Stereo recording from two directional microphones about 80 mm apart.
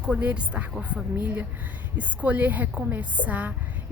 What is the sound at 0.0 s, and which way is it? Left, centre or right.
A woman's voice, centre.